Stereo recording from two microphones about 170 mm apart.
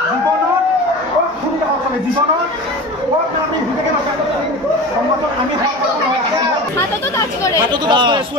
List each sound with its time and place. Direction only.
7.5 s speech: 25° right (ahead or behind)